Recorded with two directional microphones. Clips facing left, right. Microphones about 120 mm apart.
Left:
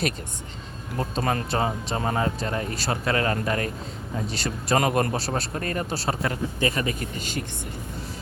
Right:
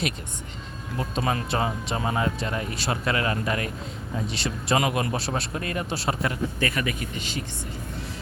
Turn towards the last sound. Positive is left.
turn(degrees=45)  # may be behind; listen again after turning